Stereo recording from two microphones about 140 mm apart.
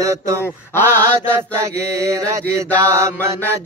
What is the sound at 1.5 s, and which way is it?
Mantra, 20° right (ahead or behind).